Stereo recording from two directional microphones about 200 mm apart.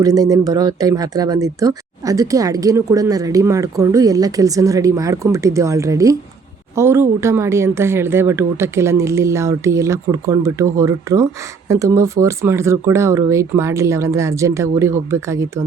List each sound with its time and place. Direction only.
0.0 s speech: 20° right (ahead or behind)